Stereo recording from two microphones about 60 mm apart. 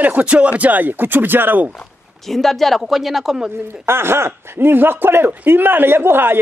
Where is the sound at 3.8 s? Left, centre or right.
Right.